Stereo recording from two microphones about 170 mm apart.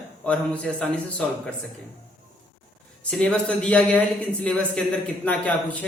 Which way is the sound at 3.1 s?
5° left (ahead or behind).